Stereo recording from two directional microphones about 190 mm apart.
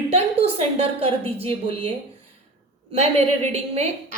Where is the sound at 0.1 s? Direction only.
30° right (ahead or behind).